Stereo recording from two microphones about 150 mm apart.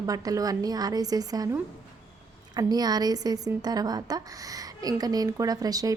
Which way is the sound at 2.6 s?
25° right (ahead or behind).